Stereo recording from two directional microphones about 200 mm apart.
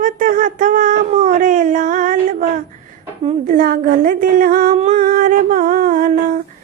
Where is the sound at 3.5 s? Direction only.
45° right (ahead or behind).